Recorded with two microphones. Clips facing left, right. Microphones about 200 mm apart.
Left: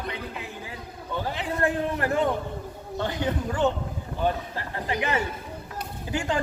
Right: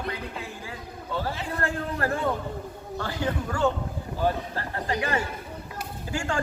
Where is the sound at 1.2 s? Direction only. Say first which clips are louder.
Left 6 dB; 20° left (ahead or behind).